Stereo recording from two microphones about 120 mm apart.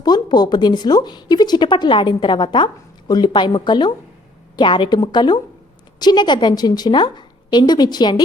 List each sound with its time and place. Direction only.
0.0 s speech: 35° left (ahead or behind)